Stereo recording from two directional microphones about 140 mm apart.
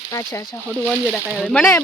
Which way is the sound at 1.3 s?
5° right (ahead or behind).